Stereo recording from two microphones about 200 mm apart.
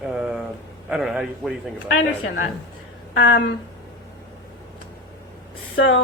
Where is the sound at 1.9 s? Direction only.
70° left (ahead or behind).